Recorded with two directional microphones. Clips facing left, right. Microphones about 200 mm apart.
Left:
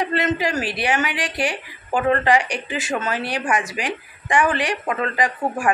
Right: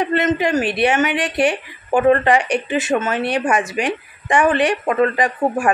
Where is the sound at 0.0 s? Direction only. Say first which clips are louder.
Right 4 dB; 20° right (ahead or behind).